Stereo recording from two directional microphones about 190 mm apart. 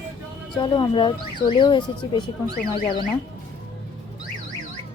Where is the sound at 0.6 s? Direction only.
25° left (ahead or behind).